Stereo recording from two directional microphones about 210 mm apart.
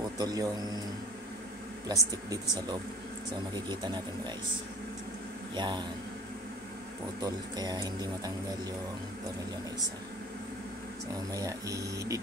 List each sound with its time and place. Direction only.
0.2 s a man's voice: 20° right (ahead or behind)
1.9 s speech: 20° right (ahead or behind)
5.6 s a man's voice: 20° right (ahead or behind)
7.2 s speech: 20° right (ahead or behind)
11.3 s speech: 15° right (ahead or behind)